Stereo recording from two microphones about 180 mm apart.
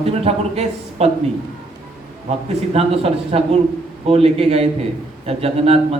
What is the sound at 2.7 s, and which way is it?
A man's voice, 35° right (ahead or behind).